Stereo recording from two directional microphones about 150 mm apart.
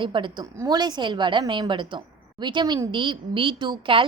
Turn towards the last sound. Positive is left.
turn(degrees=-35)  # may be behind; listen again after turning